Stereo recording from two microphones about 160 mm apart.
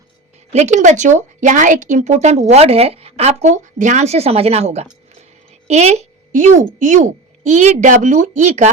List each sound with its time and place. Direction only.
0.5 s speech: 45° right (ahead or behind)